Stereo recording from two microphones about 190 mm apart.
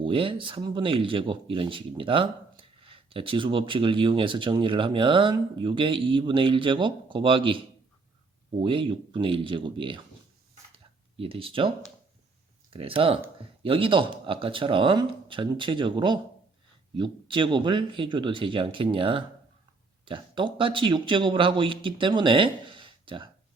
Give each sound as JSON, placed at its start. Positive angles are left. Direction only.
{"t": 0.0, "sound": "speech", "side_deg": -25}
{"t": 11.2, "sound": "speech", "side_deg": -30}
{"t": 12.7, "sound": "speech", "side_deg": -30}